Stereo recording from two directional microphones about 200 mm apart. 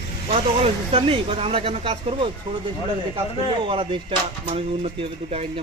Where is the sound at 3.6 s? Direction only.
25° right (ahead or behind).